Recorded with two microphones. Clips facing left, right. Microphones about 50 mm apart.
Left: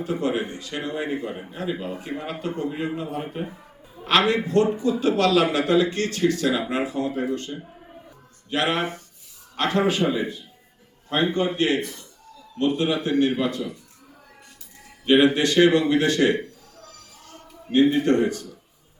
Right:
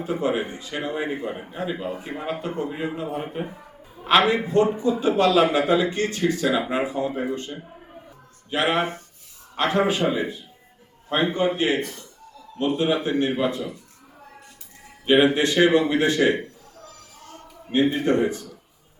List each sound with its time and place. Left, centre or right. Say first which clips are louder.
0.0 s a man's voice: right 1 dB; centre
15.0 s a man's voice: even; centre
17.7 s a man's voice: left 2 dB; centre